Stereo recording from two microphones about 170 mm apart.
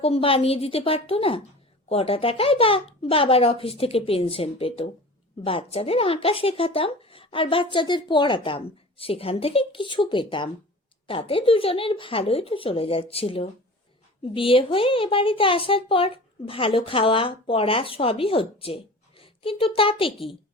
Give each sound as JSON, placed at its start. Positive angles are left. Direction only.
{"t": 0.0, "sound": "a woman's voice", "side_deg": 35}